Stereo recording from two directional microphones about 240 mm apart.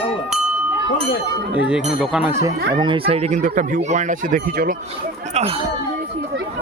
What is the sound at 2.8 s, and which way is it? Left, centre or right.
Speech, right.